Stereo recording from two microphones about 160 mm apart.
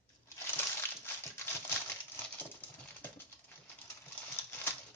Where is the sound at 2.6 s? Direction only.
10° left (ahead or behind).